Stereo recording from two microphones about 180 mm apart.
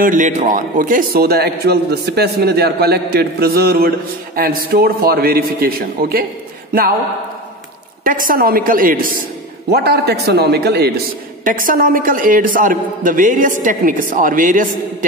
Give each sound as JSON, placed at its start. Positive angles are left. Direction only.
{"t": 0.0, "sound": "a man's voice", "side_deg": -45}
{"t": 8.0, "sound": "a man's voice", "side_deg": -50}
{"t": 9.7, "sound": "a man's voice", "side_deg": -60}
{"t": 11.4, "sound": "a man's voice", "side_deg": -50}